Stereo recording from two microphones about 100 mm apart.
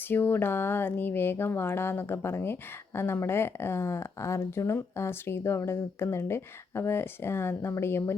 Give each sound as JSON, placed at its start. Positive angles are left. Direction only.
{"t": 0.1, "sound": "speech", "side_deg": 20}